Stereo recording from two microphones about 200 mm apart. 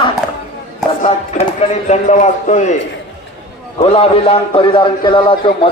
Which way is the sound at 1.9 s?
40° left (ahead or behind).